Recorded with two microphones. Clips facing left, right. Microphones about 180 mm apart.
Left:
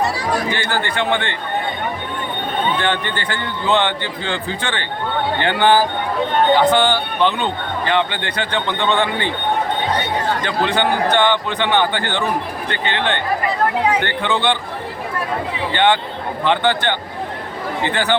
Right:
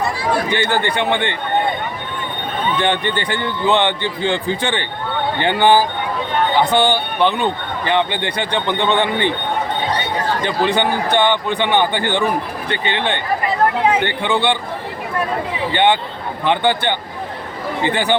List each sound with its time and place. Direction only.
0.5 s a man's voice: 20° right (ahead or behind)
2.8 s a man's voice: 15° right (ahead or behind)
10.8 s a man's voice: 15° right (ahead or behind)
15.7 s a man's voice: 15° right (ahead or behind)